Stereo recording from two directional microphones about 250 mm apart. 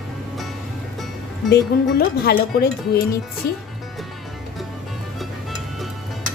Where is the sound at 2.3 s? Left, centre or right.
Left.